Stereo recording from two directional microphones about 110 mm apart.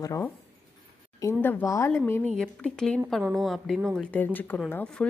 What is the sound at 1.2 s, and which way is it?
Speech, 25° left (ahead or behind).